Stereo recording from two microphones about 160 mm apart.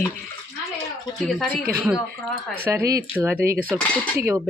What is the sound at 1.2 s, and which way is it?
Speech, centre (ahead or behind).